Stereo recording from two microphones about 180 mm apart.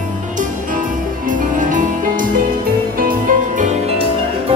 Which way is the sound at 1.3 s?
45° right (ahead or behind).